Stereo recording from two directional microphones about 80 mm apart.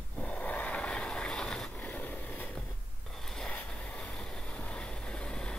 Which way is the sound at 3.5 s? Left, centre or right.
Centre.